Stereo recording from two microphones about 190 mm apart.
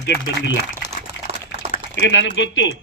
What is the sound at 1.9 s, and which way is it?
Speech, 75° left (ahead or behind).